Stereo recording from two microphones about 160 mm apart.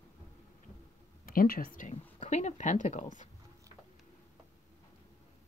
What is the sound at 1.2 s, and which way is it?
Speech, 65° left (ahead or behind).